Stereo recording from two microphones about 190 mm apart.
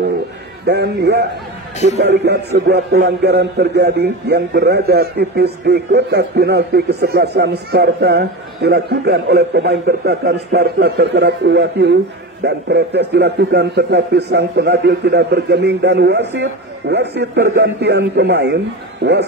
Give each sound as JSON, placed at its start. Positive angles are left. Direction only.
{"t": 0.7, "sound": "a man's voice", "side_deg": -60}